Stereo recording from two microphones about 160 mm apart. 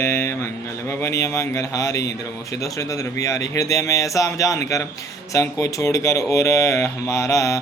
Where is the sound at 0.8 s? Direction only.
20° left (ahead or behind).